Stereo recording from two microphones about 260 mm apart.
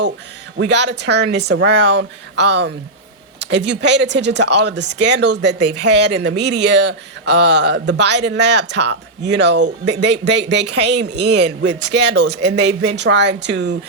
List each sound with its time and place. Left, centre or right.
0.5 s speech: right
5.9 s speech: right
6.1 s speech: right